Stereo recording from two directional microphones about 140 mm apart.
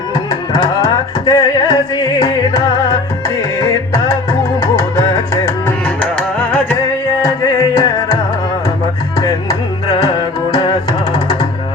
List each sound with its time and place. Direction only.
0.1 s music: 30° left (ahead or behind)
6.0 s music: 10° left (ahead or behind)
7.3 s music: 25° left (ahead or behind)